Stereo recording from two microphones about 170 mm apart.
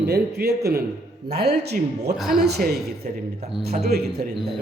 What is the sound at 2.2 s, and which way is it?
Speech, centre (ahead or behind).